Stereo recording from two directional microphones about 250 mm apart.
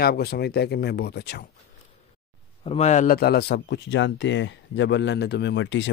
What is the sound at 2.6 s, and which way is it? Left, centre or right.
Speech, left.